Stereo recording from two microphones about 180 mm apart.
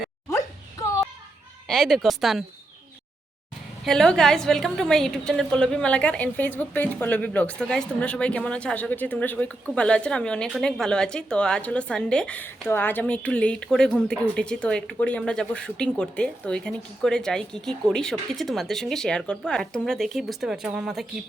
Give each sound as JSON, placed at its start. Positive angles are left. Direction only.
{"t": 0.3, "sound": "a sound", "side_deg": 15}
{"t": 1.6, "sound": "a woman's voice", "side_deg": 0}
{"t": 3.8, "sound": "a woman's voice", "side_deg": 5}